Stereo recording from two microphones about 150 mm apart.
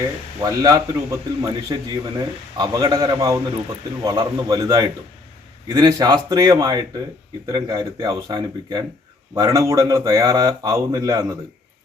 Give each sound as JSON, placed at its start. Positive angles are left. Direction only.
{"t": 0.4, "sound": "a man's voice", "side_deg": -25}